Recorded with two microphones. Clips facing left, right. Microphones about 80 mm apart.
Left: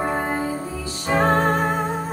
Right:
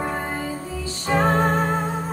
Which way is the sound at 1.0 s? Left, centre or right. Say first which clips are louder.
Left 1 dB; centre.